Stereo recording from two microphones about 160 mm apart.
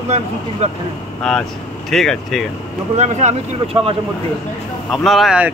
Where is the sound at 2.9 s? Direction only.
45° right (ahead or behind).